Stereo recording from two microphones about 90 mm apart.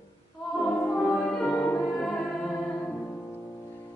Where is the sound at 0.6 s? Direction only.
20° left (ahead or behind).